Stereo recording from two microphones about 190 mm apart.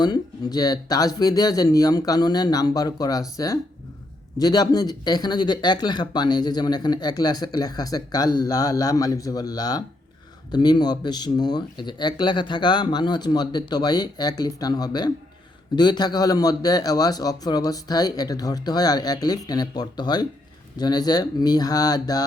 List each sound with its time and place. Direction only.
0.0 s speech: 20° left (ahead or behind)